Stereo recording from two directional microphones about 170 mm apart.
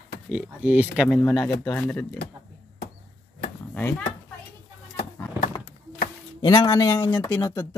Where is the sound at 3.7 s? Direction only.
10° left (ahead or behind).